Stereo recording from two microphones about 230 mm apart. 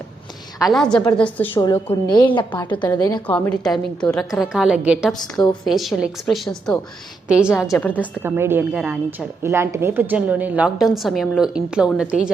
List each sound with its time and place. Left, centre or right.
0.6 s a woman's voice: centre
1.5 s a woman's voice: centre
3.3 s a woman's voice: centre
5.1 s a woman's voice: centre
5.6 s a woman's voice: centre
7.6 s a woman's voice: centre
8.2 s a woman's voice: centre